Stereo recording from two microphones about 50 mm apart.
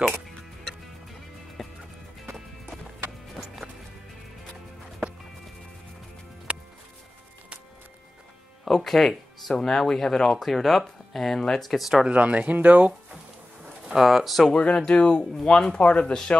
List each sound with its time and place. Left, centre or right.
1.6 s music: centre
6.5 s music: right
8.6 s speech: centre
11.7 s speech: centre
12.0 s speech: right
13.9 s speech: centre
14.5 s speech: left